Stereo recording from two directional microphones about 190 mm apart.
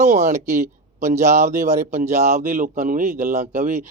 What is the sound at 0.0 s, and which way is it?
Speech, 40° right (ahead or behind).